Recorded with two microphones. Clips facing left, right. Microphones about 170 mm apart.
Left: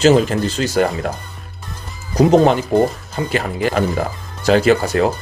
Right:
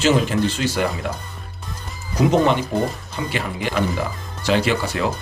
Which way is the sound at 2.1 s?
40° left (ahead or behind).